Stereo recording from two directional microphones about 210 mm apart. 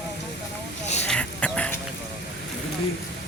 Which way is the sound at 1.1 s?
5° left (ahead or behind).